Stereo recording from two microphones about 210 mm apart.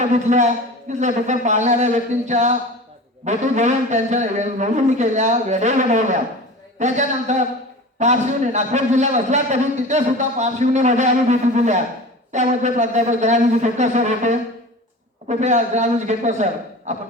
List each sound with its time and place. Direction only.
0.0 s a man's voice: 35° right (ahead or behind)